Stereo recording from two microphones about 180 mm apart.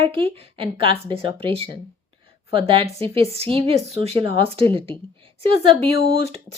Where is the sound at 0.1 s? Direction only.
30° right (ahead or behind).